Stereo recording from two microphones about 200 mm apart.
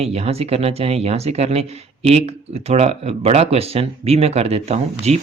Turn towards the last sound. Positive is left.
turn(degrees=-30)  # may be behind; listen again after turning